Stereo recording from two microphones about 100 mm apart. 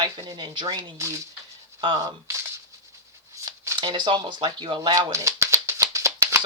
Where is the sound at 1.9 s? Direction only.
35° right (ahead or behind).